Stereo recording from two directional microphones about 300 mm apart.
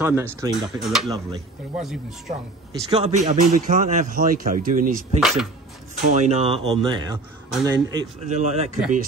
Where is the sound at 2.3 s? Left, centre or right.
Right.